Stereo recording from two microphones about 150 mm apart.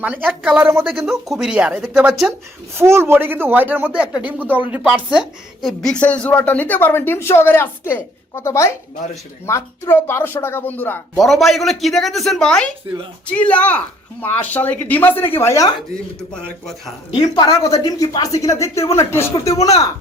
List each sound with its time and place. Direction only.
0.0 s speech: 10° right (ahead or behind)
0.9 s a woman's voice: centre (ahead or behind)
2.7 s a woman's voice: 15° right (ahead or behind); by 11.2 s 15° left (ahead or behind)
11.2 s a woman's voice: centre (ahead or behind); by 15.7 s 20° left (ahead or behind)
16.3 s a woman's voice: centre (ahead or behind)
17.1 s a woman's voice: 30° left (ahead or behind)